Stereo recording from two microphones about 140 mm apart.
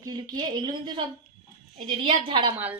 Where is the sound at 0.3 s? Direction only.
30° right (ahead or behind).